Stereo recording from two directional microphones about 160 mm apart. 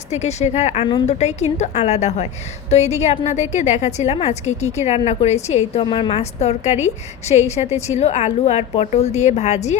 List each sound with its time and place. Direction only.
0.1 s a woman's voice: 45° left (ahead or behind)
5.8 s a woman's voice: 30° left (ahead or behind)